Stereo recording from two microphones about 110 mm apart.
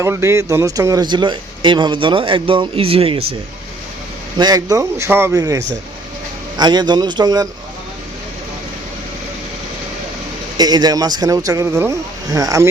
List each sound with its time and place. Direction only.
0.0 s a man's voice: 25° right (ahead or behind); by 3.2 s 60° right (ahead or behind)
4.4 s speech: 35° right (ahead or behind)
5.3 s speech: 35° right (ahead or behind)
10.6 s speech: 35° right (ahead or behind)